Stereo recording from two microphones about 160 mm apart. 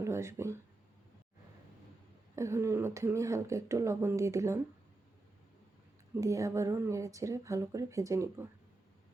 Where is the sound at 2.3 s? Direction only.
20° right (ahead or behind).